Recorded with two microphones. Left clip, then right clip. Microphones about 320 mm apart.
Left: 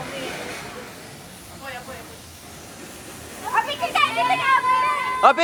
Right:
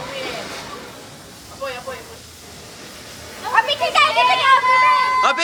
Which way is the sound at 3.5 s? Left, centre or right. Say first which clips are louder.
Right 6 dB; right.